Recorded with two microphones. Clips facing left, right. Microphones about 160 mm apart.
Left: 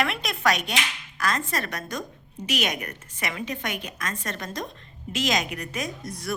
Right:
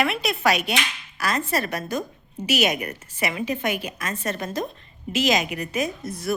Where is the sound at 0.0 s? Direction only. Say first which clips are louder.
Right 3 dB; 5° right (ahead or behind).